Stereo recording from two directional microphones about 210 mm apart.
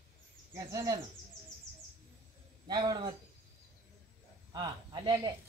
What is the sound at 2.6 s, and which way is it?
Speech, 20° right (ahead or behind).